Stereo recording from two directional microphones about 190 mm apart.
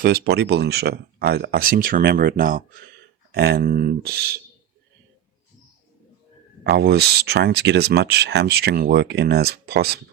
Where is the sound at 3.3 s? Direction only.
60° right (ahead or behind).